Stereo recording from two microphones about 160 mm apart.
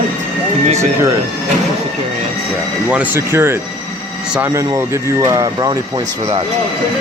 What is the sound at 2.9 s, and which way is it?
Speech, 10° right (ahead or behind).